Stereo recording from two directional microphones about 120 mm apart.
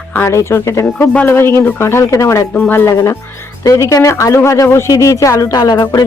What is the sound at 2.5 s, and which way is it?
A woman's voice, 15° left (ahead or behind).